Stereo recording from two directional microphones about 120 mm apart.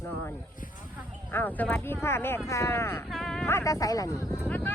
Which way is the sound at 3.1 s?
5° left (ahead or behind).